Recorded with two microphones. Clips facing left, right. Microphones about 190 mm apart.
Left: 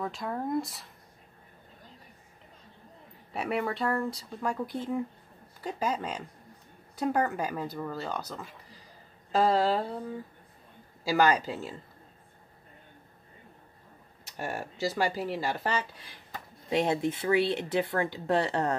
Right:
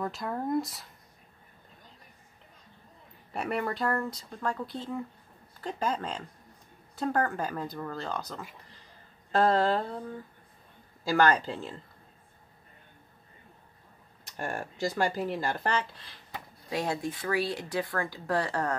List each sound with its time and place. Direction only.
0.0 s speech: centre (ahead or behind)
3.3 s speech: centre (ahead or behind)
14.3 s speech: 5° left (ahead or behind)
16.6 s speech: 20° left (ahead or behind)